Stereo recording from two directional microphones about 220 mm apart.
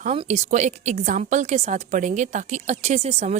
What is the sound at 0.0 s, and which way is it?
A woman's voice, 30° right (ahead or behind).